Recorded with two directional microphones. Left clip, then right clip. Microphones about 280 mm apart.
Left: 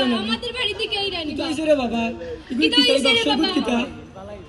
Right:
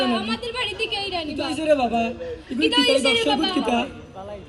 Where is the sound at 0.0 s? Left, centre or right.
Centre.